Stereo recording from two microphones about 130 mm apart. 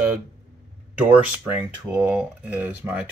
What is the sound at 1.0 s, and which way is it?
Speech, 10° right (ahead or behind).